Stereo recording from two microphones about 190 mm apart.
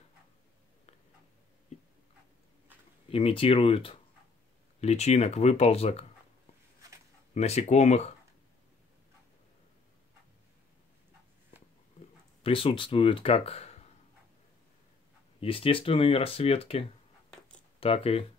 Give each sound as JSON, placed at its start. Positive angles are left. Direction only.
{"t": 3.1, "sound": "speech", "side_deg": 30}
{"t": 7.3, "sound": "speech", "side_deg": 35}
{"t": 12.4, "sound": "speech", "side_deg": 30}
{"t": 15.4, "sound": "speech", "side_deg": 30}